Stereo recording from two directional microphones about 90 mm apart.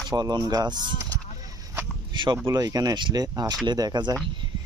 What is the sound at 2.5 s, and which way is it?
Speech, 45° right (ahead or behind).